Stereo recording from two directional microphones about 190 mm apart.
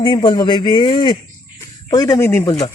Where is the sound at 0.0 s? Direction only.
25° left (ahead or behind).